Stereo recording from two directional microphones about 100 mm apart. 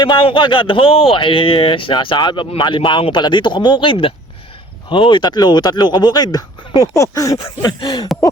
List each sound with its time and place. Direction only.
0.0 s speech: 55° left (ahead or behind); by 7.3 s 35° left (ahead or behind)
7.6 s speech: 50° left (ahead or behind)